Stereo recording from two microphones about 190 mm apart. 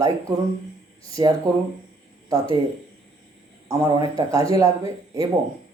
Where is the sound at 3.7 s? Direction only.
20° right (ahead or behind).